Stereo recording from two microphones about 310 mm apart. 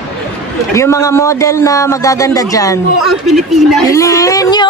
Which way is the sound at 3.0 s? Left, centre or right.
Centre.